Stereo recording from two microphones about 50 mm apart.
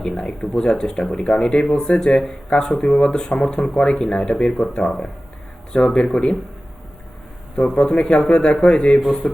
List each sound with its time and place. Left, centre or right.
0.0 s speech: centre
7.8 s speech: centre
9.0 s a man's voice: centre